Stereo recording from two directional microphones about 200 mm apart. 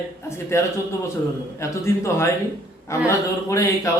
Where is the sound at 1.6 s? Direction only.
15° left (ahead or behind).